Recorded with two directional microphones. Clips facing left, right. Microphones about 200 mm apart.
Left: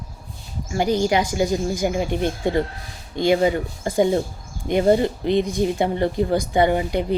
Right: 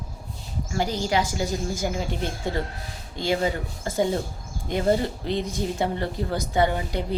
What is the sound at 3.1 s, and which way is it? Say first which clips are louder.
Speech: left 7 dB; 15° left (ahead or behind).